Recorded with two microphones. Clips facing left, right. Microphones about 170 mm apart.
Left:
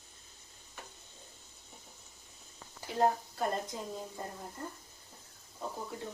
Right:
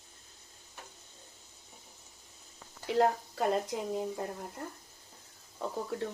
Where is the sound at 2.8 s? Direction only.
80° right.